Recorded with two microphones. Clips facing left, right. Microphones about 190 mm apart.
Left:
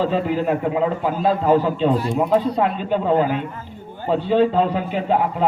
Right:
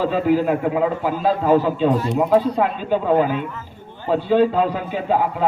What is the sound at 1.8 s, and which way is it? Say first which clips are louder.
Speech: right 1 dB; 10° left (ahead or behind).